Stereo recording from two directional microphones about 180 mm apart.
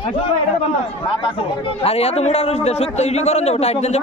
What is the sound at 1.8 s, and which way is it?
Speech, 35° left (ahead or behind).